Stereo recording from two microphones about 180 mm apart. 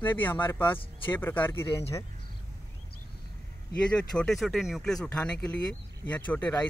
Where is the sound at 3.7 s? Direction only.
5° left (ahead or behind).